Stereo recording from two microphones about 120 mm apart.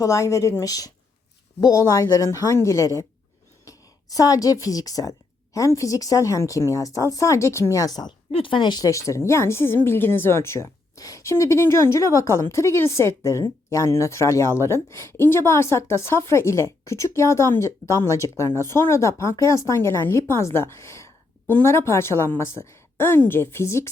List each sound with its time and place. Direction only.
0.0 s a woman's voice: 25° left (ahead or behind)
8.3 s speech: 45° left (ahead or behind); by 23.9 s 20° left (ahead or behind)